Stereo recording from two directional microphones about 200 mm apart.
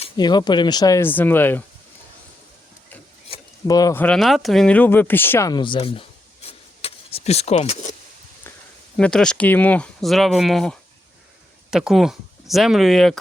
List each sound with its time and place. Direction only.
0.0 s speech: 20° left (ahead or behind)
3.2 s a sound: 25° left (ahead or behind)
4.0 s speech: centre (ahead or behind); by 7.9 s 35° left (ahead or behind)
9.0 s speech: 5° left (ahead or behind)